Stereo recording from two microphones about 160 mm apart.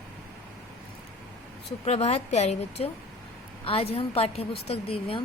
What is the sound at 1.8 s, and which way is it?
Speech, 40° left (ahead or behind).